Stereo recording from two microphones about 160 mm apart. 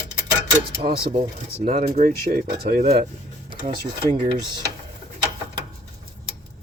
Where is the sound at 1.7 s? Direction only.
60° right (ahead or behind).